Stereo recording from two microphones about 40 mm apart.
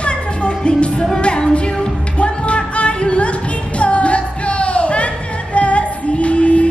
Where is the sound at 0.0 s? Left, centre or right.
Left.